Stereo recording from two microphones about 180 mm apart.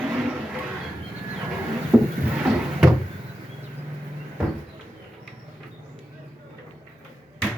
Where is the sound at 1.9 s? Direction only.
10° right (ahead or behind).